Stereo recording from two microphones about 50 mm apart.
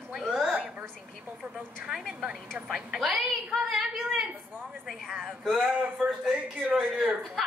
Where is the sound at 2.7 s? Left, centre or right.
Centre.